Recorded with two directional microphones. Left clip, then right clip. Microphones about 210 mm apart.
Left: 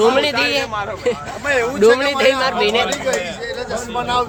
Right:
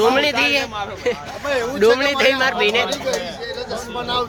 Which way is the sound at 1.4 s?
10° left (ahead or behind).